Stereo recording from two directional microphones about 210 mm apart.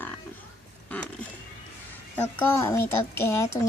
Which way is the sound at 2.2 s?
10° left (ahead or behind).